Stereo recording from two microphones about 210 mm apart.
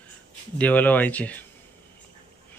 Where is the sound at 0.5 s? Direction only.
5° left (ahead or behind).